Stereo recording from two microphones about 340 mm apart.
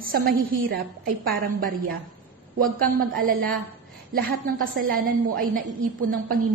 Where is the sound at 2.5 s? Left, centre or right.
Right.